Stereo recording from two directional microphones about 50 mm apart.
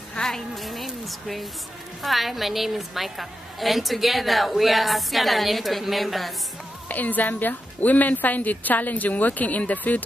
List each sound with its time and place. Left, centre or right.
0.2 s a woman's voice: centre
6.9 s a woman's voice: left